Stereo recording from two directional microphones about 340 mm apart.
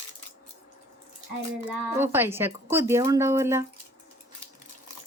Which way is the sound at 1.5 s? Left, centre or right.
Centre.